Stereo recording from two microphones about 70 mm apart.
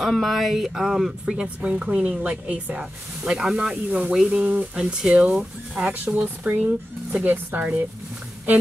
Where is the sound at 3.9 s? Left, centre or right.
Right.